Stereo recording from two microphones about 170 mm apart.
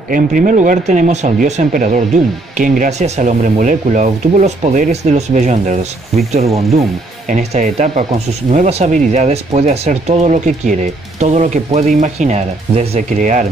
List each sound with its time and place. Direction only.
0.1 s speech: 50° right (ahead or behind)